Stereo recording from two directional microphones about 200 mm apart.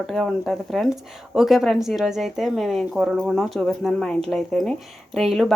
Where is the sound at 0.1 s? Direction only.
Centre (ahead or behind).